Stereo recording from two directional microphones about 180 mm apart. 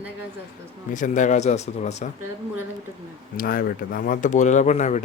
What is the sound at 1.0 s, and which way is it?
Speech, 45° left (ahead or behind).